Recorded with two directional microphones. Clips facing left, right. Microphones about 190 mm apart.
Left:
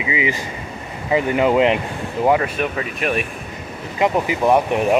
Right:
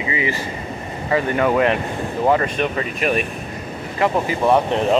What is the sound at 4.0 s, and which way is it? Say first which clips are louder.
Speech: left 1 dB; 15° left (ahead or behind).